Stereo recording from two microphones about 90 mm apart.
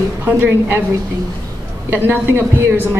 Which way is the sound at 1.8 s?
20° right (ahead or behind).